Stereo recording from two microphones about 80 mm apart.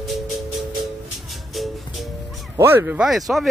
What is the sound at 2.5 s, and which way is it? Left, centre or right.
Speech, right.